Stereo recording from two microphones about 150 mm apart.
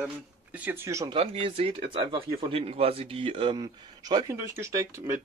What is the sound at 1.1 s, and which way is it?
Speech, 35° right (ahead or behind).